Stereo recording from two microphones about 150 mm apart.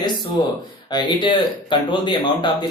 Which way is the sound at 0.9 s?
30° left (ahead or behind).